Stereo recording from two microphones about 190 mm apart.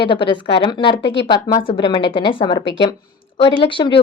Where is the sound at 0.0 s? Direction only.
25° left (ahead or behind).